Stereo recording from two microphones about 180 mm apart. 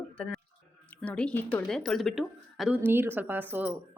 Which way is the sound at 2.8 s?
10° right (ahead or behind).